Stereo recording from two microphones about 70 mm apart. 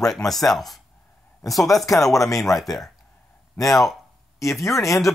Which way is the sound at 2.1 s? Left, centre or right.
Left.